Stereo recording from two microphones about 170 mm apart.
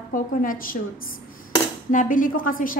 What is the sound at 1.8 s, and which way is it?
Speech, 50° left (ahead or behind).